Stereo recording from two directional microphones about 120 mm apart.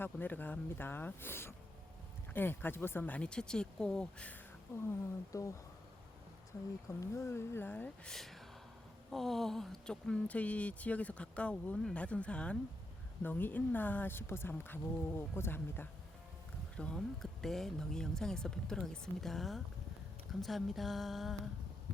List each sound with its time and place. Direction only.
0.0 s speech: 15° left (ahead or behind)
4.8 s speech: 25° left (ahead or behind)
7.0 s speech: 25° left (ahead or behind)
8.1 s speech: centre (ahead or behind)